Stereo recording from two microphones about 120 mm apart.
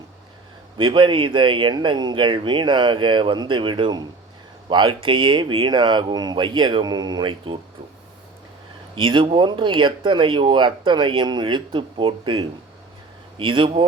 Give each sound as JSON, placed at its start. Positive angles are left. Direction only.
{"t": 0.8, "sound": "speech", "side_deg": -45}
{"t": 9.0, "sound": "speech", "side_deg": -45}